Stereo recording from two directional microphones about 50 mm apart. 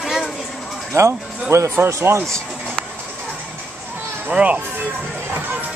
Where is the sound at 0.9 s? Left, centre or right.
Right.